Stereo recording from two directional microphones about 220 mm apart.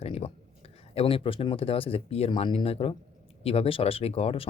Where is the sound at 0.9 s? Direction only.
25° left (ahead or behind).